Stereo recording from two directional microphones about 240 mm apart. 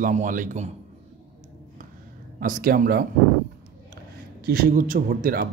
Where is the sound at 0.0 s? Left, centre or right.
Right.